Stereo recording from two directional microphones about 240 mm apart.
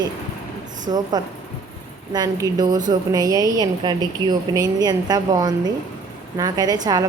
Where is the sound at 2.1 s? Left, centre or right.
Centre.